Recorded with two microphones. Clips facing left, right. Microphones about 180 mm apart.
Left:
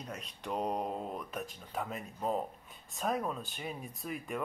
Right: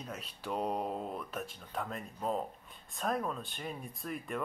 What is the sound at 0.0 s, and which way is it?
Speech, centre (ahead or behind).